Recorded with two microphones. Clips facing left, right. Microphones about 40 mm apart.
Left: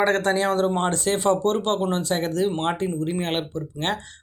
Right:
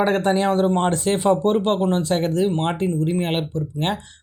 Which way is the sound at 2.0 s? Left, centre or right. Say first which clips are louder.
Right 3 dB; right.